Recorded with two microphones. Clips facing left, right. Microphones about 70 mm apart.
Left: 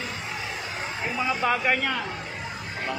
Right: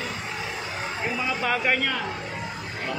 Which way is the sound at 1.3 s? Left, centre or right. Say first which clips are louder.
Left 1 dB; centre.